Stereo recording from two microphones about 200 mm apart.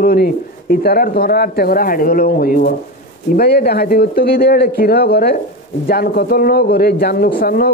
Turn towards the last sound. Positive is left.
turn(degrees=50)  # may be behind; listen again after turning